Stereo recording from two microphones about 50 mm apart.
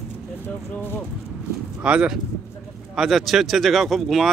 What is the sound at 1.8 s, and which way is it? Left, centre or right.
Speech, centre.